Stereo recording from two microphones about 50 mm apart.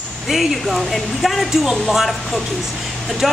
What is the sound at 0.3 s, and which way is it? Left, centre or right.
Speech, centre.